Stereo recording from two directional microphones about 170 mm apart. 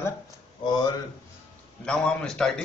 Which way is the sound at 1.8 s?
5° left (ahead or behind).